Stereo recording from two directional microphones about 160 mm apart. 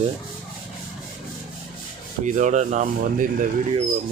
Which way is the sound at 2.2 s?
50° right (ahead or behind).